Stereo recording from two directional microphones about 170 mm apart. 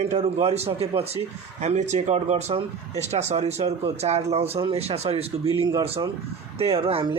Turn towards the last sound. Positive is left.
turn(degrees=-30)  # may be behind; listen again after turning